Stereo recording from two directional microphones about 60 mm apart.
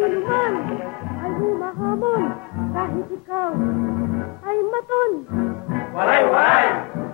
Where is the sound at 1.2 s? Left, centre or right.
Right.